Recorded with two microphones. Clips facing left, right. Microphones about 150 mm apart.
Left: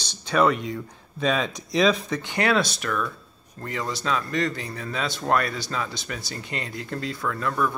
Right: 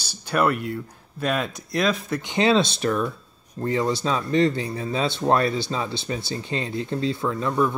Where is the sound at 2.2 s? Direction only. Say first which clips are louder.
Right 3 dB; 20° right (ahead or behind).